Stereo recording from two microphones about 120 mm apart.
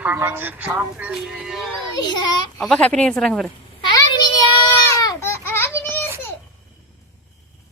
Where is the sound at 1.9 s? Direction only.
35° left (ahead or behind).